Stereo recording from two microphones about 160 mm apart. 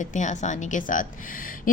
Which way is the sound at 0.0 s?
50° left (ahead or behind).